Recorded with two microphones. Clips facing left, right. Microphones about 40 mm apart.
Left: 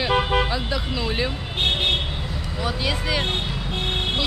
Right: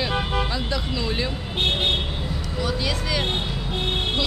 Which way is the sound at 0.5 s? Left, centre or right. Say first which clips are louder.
Left 1 dB; centre.